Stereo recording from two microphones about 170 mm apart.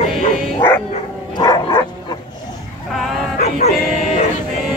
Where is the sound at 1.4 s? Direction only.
25° left (ahead or behind).